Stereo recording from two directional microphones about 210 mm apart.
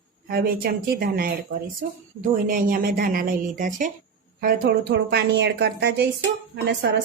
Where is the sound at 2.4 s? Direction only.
40° right (ahead or behind).